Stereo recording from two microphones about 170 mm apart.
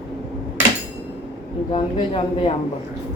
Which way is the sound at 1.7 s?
35° left (ahead or behind).